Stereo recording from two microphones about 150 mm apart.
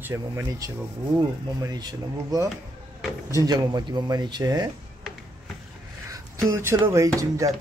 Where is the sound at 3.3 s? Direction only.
25° right (ahead or behind).